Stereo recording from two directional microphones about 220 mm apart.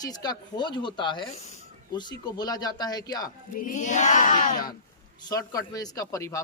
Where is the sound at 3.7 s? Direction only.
35° left (ahead or behind).